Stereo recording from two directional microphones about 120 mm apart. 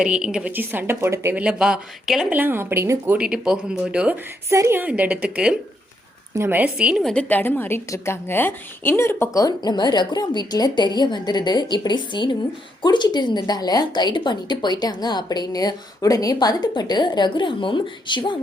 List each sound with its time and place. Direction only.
0.0 s a woman's voice: 5° right (ahead or behind)
1.4 s speech: 5° right (ahead or behind)
2.4 s a woman's voice: 20° right (ahead or behind)
3.2 s a woman's voice: 5° right (ahead or behind)
4.4 s a woman's voice: 25° right (ahead or behind)
6.3 s a woman's voice: 20° right (ahead or behind)
7.0 s a woman's voice: 10° left (ahead or behind); by 18.3 s 40° left (ahead or behind)